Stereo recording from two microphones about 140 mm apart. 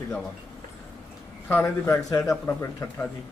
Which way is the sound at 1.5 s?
15° left (ahead or behind).